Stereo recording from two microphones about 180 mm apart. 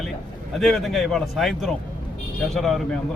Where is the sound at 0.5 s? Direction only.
Centre (ahead or behind).